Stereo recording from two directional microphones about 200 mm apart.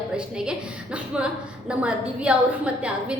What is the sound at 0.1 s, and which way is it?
A woman's voice, 5° right (ahead or behind).